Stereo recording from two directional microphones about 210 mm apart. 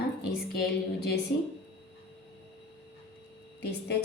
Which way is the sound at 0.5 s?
50° left (ahead or behind).